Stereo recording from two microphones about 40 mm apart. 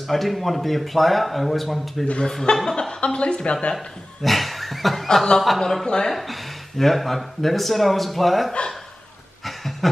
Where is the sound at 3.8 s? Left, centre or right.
Centre.